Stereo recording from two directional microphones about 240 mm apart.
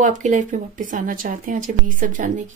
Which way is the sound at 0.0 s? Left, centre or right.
Right.